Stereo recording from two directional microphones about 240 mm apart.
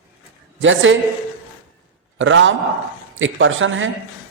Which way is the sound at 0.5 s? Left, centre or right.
Right.